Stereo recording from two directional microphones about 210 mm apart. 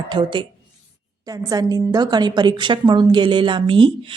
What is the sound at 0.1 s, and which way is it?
A woman's voice, 25° right (ahead or behind).